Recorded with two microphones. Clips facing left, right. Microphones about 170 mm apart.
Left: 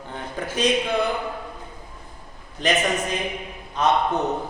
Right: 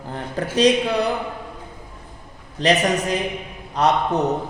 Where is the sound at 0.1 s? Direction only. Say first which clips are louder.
Right 5 dB; 35° right (ahead or behind).